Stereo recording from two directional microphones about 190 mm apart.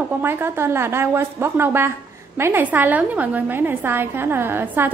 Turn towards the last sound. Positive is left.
turn(degrees=-10)  # may be behind; listen again after turning